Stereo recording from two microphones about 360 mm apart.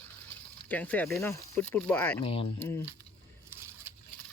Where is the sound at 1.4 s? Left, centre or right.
Centre.